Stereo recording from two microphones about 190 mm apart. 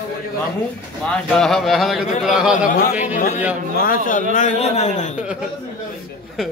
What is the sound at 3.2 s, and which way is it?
A man's voice, 40° left (ahead or behind).